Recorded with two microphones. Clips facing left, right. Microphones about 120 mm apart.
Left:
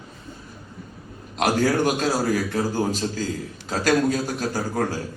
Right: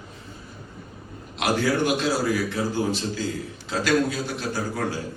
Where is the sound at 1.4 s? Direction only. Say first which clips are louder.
Left 2 dB; 45° left (ahead or behind).